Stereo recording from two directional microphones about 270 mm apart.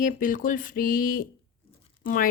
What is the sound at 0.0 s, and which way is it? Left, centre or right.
Speech, left.